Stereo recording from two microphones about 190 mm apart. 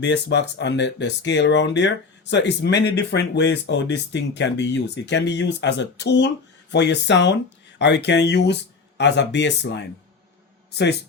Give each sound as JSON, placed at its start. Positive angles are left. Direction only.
{"t": 0.0, "sound": "speech", "side_deg": 65}